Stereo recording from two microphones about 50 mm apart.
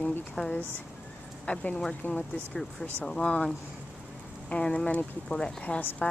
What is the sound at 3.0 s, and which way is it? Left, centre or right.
Speech, centre.